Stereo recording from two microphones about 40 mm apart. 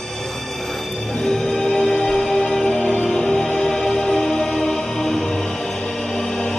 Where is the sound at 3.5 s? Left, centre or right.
Centre.